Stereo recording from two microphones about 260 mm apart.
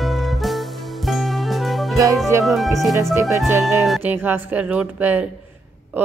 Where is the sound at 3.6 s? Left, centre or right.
Centre.